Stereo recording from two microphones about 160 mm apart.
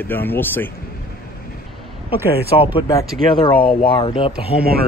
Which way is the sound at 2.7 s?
25° left (ahead or behind).